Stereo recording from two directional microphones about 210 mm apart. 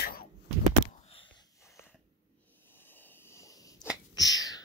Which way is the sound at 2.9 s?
10° left (ahead or behind).